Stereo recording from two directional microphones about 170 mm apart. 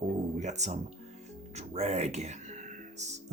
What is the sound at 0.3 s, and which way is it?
Speech, 45° right (ahead or behind).